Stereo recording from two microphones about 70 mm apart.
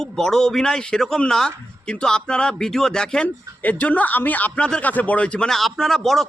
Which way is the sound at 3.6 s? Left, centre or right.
Left.